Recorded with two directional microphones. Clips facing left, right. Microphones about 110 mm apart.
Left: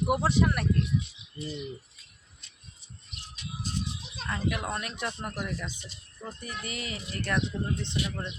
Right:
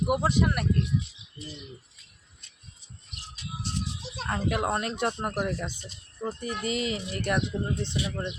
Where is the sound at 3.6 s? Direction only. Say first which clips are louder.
Right 1 dB; 90° right.